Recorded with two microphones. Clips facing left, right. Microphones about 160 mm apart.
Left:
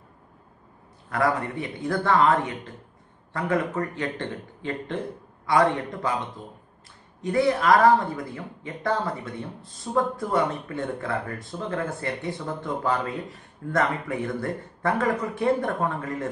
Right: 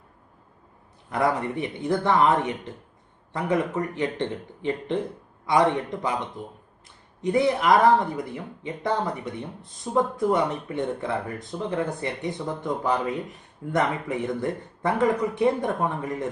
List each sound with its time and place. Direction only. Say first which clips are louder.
1.1 s speech: right 1 dB; 20° right (ahead or behind)